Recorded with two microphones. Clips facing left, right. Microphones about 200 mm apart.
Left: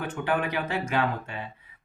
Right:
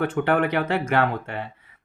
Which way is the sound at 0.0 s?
60° right (ahead or behind).